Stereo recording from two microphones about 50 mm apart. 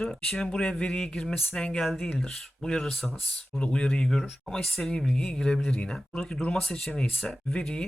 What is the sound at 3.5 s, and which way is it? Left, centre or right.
Speech, left.